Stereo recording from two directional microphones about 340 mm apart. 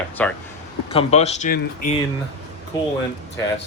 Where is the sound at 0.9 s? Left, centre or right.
Centre.